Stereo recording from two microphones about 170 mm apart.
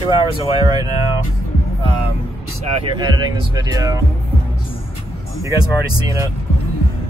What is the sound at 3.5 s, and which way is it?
Speech, 20° right (ahead or behind).